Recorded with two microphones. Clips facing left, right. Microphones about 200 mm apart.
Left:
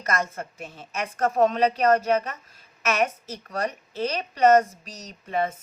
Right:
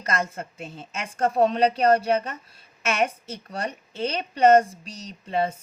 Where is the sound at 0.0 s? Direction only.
30° right (ahead or behind).